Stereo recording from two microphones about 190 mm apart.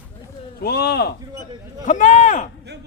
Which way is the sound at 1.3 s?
20° right (ahead or behind).